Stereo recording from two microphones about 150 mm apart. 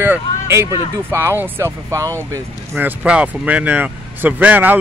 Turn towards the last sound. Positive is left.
turn(degrees=-10)  # may be behind; listen again after turning